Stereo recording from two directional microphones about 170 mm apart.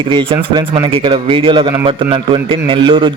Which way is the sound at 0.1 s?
30° right (ahead or behind).